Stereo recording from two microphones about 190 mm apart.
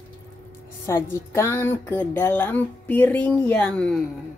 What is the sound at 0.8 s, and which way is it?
A woman's voice, 15° left (ahead or behind).